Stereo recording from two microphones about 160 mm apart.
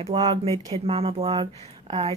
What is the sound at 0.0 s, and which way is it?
Speech, 35° right (ahead or behind).